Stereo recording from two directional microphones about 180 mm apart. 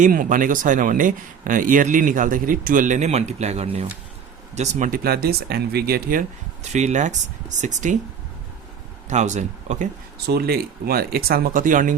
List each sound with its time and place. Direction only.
0.0 s speech: 50° right (ahead or behind)
9.0 s speech: 40° right (ahead or behind)
10.2 s speech: 60° right (ahead or behind)